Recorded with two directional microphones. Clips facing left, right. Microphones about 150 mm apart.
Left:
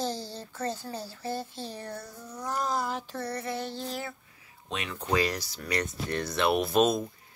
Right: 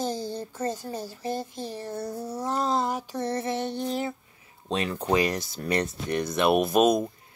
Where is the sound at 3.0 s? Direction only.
10° right (ahead or behind).